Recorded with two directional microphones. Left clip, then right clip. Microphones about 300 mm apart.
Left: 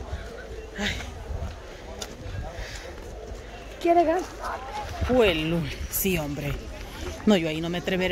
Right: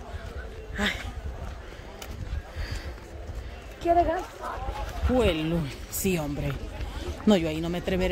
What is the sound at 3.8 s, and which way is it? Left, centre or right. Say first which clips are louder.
Speech: left 2 dB; left.